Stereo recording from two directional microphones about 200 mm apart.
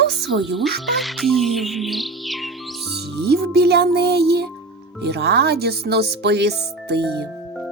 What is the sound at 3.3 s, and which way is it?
Speech, 55° right (ahead or behind).